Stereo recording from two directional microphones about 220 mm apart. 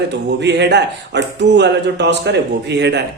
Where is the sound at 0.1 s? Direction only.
50° right (ahead or behind).